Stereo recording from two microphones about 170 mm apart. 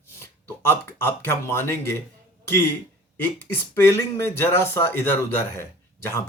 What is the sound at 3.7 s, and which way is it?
Speech, 15° left (ahead or behind).